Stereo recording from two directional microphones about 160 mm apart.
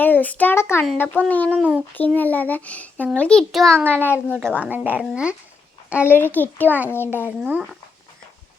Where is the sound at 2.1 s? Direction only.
10° left (ahead or behind).